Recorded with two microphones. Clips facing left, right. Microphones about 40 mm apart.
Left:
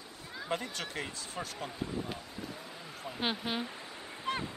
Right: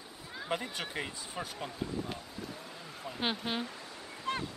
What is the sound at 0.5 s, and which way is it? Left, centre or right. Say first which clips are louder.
Speech: even; centre.